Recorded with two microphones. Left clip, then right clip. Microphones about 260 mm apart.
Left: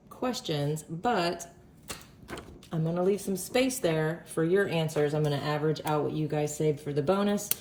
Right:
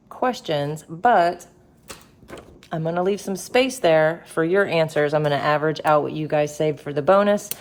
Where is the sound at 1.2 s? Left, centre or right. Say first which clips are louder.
Right 9 dB; centre.